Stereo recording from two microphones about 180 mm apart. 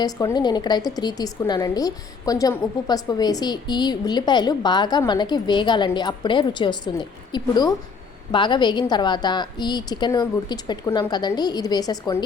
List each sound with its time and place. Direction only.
0.0 s a woman's voice: 20° left (ahead or behind)